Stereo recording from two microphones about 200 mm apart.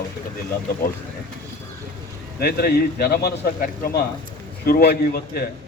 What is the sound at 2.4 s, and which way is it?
A man's voice, 50° left (ahead or behind).